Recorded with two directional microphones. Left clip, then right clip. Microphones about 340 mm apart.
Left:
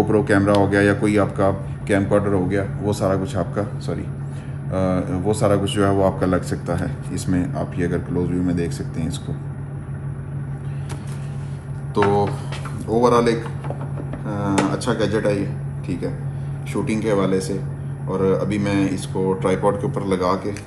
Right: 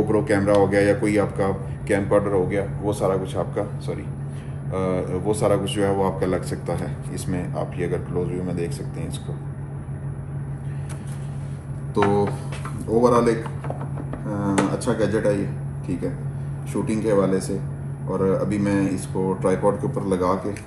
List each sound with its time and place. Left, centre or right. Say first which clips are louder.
0.3 s speech: right 1 dB; left
11.9 s speech: left 2 dB; centre